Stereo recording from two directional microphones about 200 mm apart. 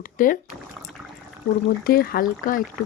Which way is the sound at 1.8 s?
50° left (ahead or behind).